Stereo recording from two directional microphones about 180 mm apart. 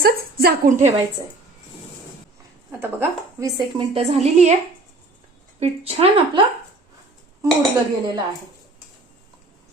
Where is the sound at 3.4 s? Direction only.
20° right (ahead or behind).